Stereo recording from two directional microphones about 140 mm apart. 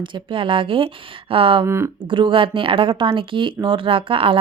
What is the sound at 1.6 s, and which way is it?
Speech, 20° right (ahead or behind).